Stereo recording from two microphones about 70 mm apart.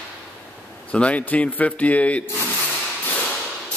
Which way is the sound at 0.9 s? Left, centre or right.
Centre.